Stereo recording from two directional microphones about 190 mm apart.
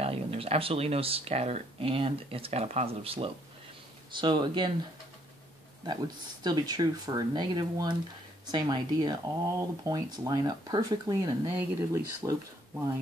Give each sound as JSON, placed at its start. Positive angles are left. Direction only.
{"t": 0.0, "sound": "speech", "side_deg": -30}
{"t": 6.4, "sound": "speech", "side_deg": -20}